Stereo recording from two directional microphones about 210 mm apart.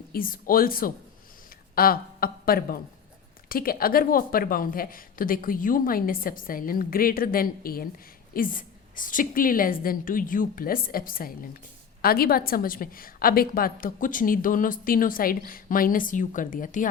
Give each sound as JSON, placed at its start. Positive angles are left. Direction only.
{"t": 0.1, "sound": "a woman's voice", "side_deg": 45}